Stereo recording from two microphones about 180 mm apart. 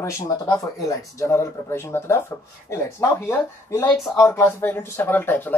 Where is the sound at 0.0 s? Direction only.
20° left (ahead or behind).